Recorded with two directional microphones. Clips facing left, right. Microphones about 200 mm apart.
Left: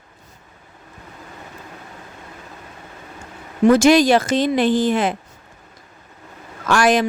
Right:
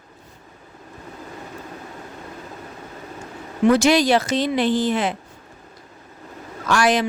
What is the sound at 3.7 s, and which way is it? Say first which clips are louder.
A woman's voice: left 4 dB; 50° left (ahead or behind).